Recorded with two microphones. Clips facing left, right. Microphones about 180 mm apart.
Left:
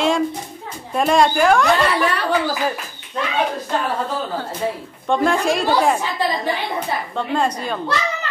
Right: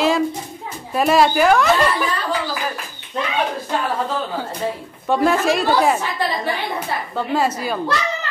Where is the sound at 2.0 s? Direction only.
70° left (ahead or behind).